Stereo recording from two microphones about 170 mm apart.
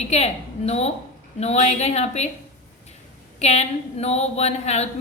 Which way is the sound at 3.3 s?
40° left (ahead or behind).